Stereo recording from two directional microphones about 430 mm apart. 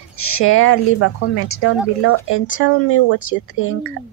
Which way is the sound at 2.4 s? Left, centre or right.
Centre.